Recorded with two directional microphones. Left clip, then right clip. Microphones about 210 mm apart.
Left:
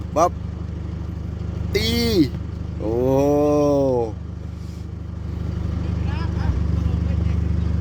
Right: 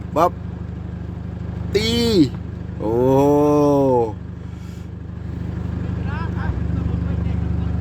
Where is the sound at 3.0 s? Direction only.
20° right (ahead or behind).